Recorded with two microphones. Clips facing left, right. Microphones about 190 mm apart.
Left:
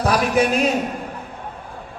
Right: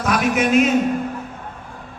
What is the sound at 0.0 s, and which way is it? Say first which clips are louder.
Speech: left 1 dB; 35° left (ahead or behind).